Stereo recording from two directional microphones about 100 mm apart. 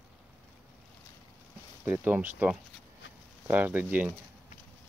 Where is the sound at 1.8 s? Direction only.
20° right (ahead or behind).